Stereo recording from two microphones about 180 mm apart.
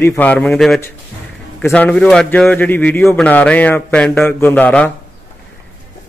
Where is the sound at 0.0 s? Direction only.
10° left (ahead or behind).